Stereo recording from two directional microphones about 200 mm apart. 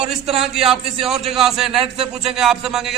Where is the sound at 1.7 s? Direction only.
25° right (ahead or behind).